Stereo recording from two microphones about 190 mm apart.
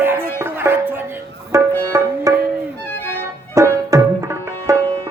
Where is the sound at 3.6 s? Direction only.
15° right (ahead or behind).